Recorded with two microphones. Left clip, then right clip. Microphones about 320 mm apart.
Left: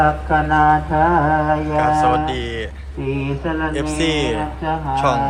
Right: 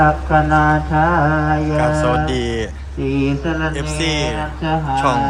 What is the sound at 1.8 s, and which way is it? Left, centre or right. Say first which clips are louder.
Speech: left 3 dB; centre.